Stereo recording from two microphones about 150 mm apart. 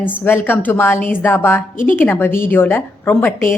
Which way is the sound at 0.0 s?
15° left (ahead or behind).